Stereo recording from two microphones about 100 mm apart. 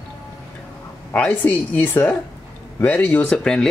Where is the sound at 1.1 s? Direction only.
15° left (ahead or behind).